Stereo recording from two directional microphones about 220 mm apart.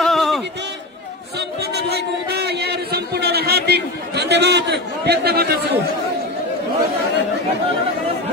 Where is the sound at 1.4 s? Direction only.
50° right (ahead or behind).